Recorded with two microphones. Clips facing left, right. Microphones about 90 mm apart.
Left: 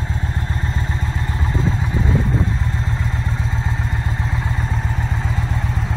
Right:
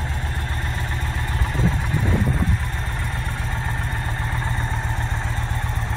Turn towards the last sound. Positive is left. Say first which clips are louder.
# left 2 dB
turn(degrees=5)  # may be behind; listen again after turning